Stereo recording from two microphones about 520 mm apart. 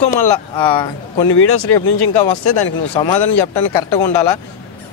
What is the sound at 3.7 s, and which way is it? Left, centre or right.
Speech, centre.